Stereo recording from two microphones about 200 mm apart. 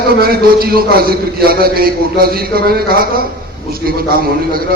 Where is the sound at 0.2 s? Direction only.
50° right (ahead or behind).